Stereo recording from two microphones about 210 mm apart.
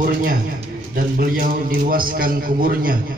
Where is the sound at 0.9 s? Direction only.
40° right (ahead or behind).